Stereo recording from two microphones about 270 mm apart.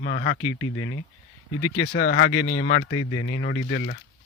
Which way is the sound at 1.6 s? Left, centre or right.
Left.